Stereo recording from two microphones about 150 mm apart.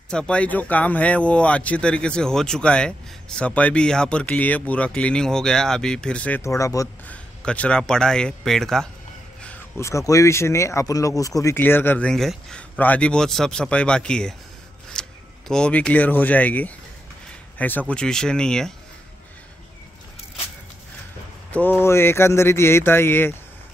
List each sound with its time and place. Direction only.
0.1 s speech: 5° left (ahead or behind)
7.1 s a man's voice: 10° left (ahead or behind)
9.8 s a man's voice: 20° left (ahead or behind)
21.5 s speech: 10° left (ahead or behind)